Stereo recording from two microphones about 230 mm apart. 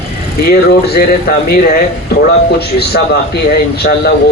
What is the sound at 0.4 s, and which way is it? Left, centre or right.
Speech, left.